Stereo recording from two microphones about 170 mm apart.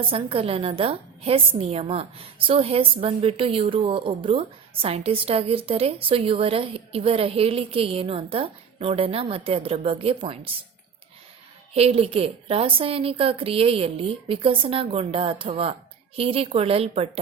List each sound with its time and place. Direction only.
0.0 s a woman's voice: 35° right (ahead or behind)
11.7 s a woman's voice: 35° right (ahead or behind)